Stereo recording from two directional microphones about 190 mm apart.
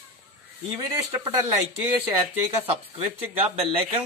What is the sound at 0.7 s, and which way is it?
Speech, 20° right (ahead or behind).